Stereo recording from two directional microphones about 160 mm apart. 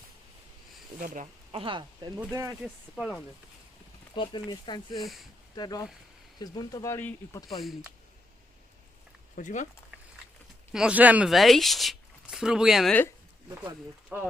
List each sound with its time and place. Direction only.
0.9 s speech: 55° right (ahead or behind)
1.5 s speech: 30° right (ahead or behind)
2.1 s speech: 20° right (ahead or behind)
3.0 s speech: 5° right (ahead or behind)
4.1 s speech: 30° left (ahead or behind)
4.9 s speech: centre (ahead or behind)
5.5 s speech: 25° left (ahead or behind)
7.6 s speech: centre (ahead or behind)
9.3 s speech: 50° left (ahead or behind)
10.7 s speech: 5° right (ahead or behind)
12.9 s speech: 10° left (ahead or behind)
14.1 s speech: 10° right (ahead or behind)